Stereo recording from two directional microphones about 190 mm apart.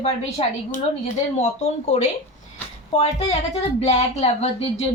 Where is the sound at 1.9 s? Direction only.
35° left (ahead or behind).